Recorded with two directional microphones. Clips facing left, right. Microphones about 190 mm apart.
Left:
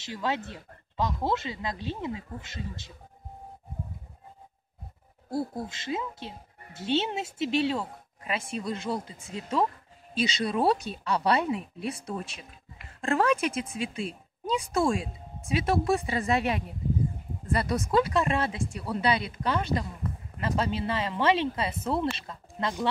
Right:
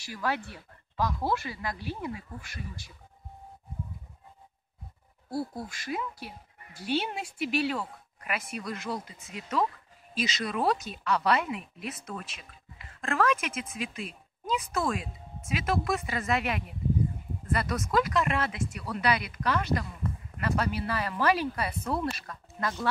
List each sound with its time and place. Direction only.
0.0 s a woman's voice: 20° left (ahead or behind)
5.3 s a woman's voice: 20° left (ahead or behind)